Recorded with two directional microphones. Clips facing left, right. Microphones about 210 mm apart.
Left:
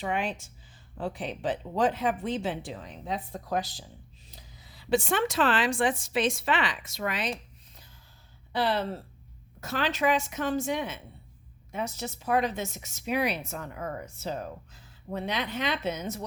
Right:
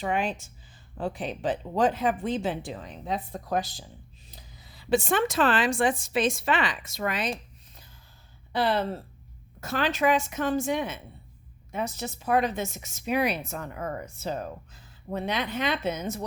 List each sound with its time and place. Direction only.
0.0 s speech: 45° right (ahead or behind)
4.9 s speech: 45° right (ahead or behind)
8.5 s speech: 50° right (ahead or behind)